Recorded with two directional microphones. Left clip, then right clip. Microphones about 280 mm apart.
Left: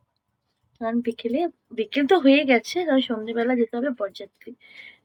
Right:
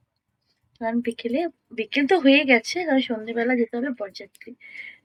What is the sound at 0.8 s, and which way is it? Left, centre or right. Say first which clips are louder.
A woman's voice: even; centre.